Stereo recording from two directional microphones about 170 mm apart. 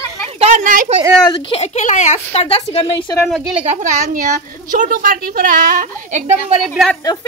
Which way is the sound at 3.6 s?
45° right (ahead or behind).